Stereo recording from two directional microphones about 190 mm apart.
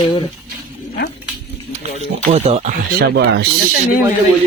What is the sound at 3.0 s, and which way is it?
Speech, 60° right (ahead or behind).